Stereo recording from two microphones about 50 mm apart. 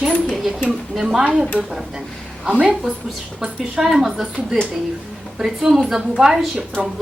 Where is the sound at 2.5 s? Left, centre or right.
Right.